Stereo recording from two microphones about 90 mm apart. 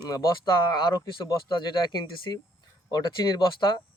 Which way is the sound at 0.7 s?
50° left (ahead or behind).